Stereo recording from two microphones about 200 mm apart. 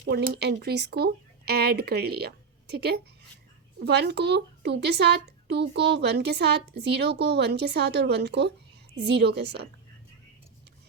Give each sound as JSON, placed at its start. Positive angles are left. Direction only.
{"t": 0.1, "sound": "a woman's voice", "side_deg": -55}